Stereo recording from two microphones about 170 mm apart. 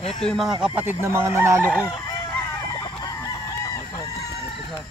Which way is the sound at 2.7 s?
20° left (ahead or behind).